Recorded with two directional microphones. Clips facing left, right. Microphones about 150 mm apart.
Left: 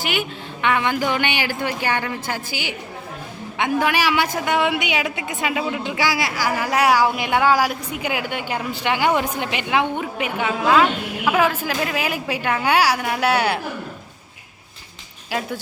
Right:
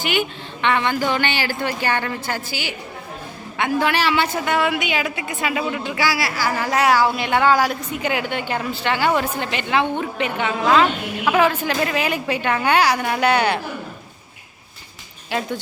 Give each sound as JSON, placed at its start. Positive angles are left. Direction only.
{"t": 0.0, "sound": "speech", "side_deg": 5}
{"t": 5.5, "sound": "a man's voice", "side_deg": 5}
{"t": 6.0, "sound": "speech", "side_deg": 20}
{"t": 15.3, "sound": "speech", "side_deg": 5}